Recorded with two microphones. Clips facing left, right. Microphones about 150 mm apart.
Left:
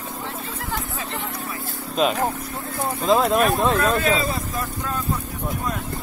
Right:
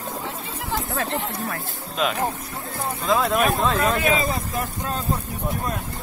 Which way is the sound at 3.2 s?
Centre (ahead or behind).